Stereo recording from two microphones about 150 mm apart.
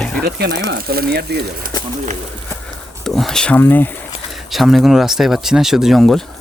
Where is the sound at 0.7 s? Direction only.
90° right.